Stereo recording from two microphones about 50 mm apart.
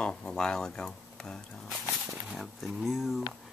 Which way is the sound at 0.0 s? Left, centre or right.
Centre.